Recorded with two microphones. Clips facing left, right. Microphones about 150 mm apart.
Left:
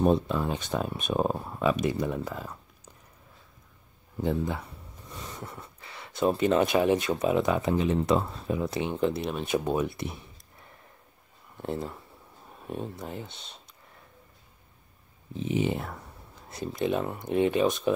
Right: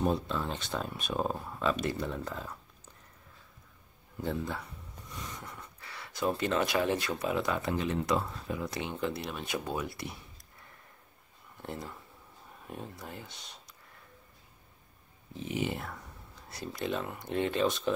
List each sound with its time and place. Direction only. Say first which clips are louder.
0.0 s speech: left 6 dB; 20° left (ahead or behind)
5.1 s speech: left 3 dB; 30° left (ahead or behind)
11.6 s speech: left 8 dB; 25° left (ahead or behind)
15.3 s speech: left 6 dB; 20° left (ahead or behind)